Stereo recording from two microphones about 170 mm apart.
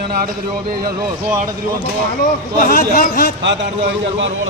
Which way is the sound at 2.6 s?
60° left (ahead or behind).